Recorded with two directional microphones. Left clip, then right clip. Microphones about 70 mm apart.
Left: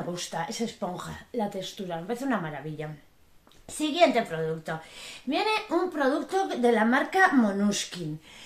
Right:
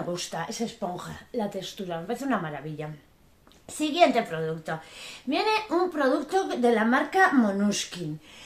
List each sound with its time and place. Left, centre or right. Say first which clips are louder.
0.1 s speech: right 2 dB; right
0.7 s speech: right 1 dB; centre
1.3 s a woman's voice: even; centre